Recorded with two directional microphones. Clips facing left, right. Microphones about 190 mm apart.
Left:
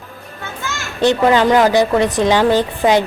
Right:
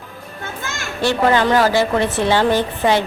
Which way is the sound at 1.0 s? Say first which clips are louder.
Left 3 dB; 20° left (ahead or behind).